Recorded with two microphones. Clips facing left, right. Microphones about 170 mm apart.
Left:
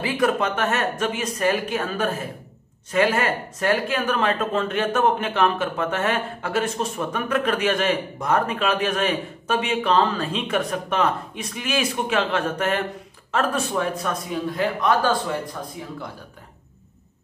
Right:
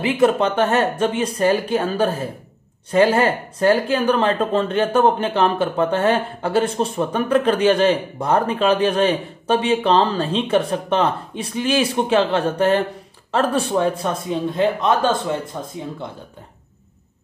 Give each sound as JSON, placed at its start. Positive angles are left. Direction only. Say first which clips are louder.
{"t": 0.0, "sound": "a man's voice", "louder": "right 5 dB", "side_deg": -25}